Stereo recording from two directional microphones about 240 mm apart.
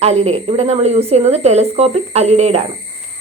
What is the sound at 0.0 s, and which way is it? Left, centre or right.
Speech, right.